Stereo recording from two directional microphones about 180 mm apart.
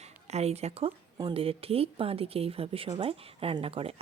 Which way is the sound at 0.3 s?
35° right (ahead or behind).